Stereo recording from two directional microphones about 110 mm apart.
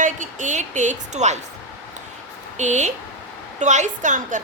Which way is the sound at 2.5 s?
90° right.